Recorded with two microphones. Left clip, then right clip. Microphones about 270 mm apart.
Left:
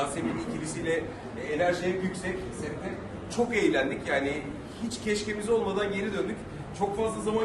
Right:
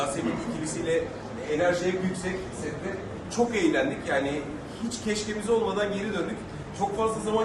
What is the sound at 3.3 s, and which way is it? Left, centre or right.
A man's voice, centre.